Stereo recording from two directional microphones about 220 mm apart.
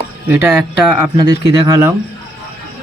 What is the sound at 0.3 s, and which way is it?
Speech, 10° right (ahead or behind).